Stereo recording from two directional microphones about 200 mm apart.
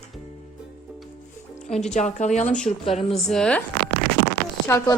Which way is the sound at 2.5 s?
5° left (ahead or behind).